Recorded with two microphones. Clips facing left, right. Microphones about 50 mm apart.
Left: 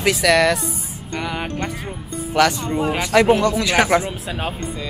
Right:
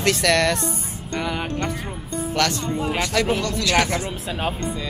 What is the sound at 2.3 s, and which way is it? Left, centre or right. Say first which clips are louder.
Speech: left 6 dB; centre.